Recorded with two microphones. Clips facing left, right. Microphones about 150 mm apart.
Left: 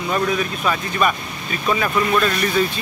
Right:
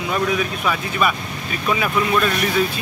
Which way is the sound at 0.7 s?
5° right (ahead or behind).